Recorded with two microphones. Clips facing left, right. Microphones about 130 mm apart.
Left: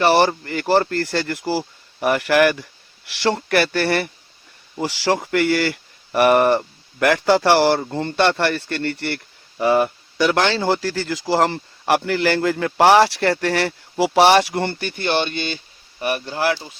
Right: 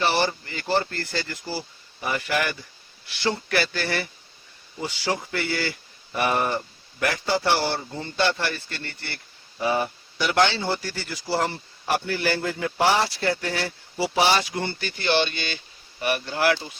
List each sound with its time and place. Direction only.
0.0 s speech: 65° left (ahead or behind)
4.8 s speech: 85° left; by 14.8 s 70° left (ahead or behind)
15.0 s speech: 45° left (ahead or behind)
16.0 s speech: 35° left (ahead or behind)